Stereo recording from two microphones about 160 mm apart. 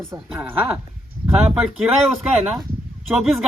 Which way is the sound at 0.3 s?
10° right (ahead or behind).